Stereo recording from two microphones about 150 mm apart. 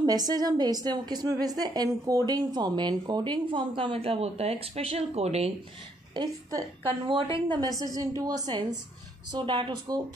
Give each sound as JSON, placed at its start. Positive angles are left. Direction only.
{"t": 0.0, "sound": "a woman's voice", "side_deg": -25}
{"t": 6.9, "sound": "a woman's voice", "side_deg": -35}